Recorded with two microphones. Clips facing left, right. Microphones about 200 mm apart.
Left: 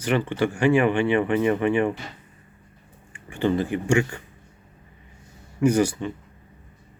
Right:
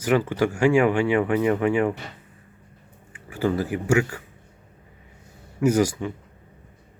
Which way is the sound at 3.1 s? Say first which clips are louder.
Left 1 dB; 5° right (ahead or behind).